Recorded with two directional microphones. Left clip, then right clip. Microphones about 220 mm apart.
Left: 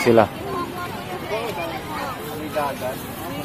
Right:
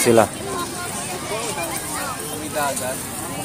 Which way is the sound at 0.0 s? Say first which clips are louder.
Even; 5° right (ahead or behind).